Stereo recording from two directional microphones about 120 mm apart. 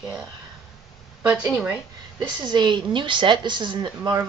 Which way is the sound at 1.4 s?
5° right (ahead or behind).